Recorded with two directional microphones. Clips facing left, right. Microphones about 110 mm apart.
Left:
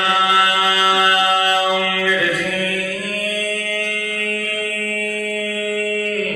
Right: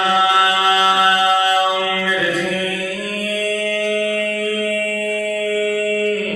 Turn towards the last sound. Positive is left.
turn(degrees=-25)  # may be behind; listen again after turning